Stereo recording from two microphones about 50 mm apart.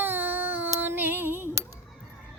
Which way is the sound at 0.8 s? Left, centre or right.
Right.